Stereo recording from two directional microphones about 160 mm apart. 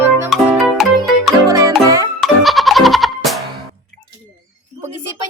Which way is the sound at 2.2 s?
Centre (ahead or behind).